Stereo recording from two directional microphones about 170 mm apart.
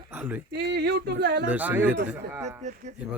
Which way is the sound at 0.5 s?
80° right.